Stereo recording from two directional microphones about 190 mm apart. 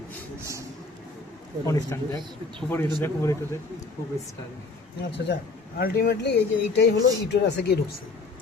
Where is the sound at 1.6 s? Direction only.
15° left (ahead or behind).